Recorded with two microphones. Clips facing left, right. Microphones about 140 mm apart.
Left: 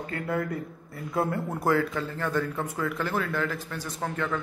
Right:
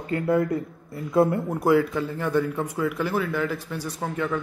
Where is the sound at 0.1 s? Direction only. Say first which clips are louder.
Right 8 dB; 25° right (ahead or behind).